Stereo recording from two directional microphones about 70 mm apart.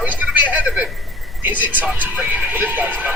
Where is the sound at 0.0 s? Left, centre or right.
Right.